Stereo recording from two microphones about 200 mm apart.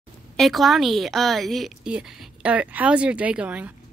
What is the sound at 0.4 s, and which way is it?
A woman's voice, centre (ahead or behind).